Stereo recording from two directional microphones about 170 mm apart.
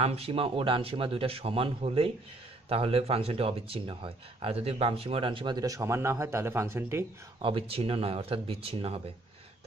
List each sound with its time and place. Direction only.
0.0 s speech: 35° right (ahead or behind); by 7.1 s 15° right (ahead or behind)
7.4 s speech: 35° right (ahead or behind)